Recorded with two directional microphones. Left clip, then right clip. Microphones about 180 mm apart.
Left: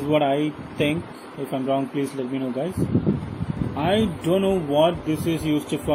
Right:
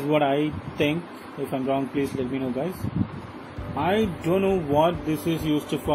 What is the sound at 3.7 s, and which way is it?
Speech, 15° left (ahead or behind).